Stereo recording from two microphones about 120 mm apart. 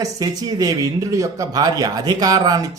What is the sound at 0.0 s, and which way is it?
A man's voice, 30° right (ahead or behind).